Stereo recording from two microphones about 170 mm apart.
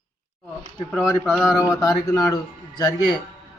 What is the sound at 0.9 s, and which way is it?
Speech, centre (ahead or behind).